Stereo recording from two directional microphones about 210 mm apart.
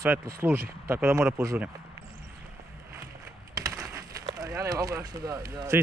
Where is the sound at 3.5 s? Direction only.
15° right (ahead or behind).